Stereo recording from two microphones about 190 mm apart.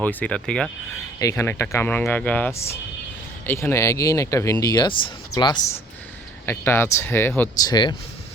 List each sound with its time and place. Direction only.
0.0 s speech: 10° left (ahead or behind)
1.2 s speech: 15° left (ahead or behind)
6.4 s speech: 10° left (ahead or behind)
7.7 s speech: 25° left (ahead or behind)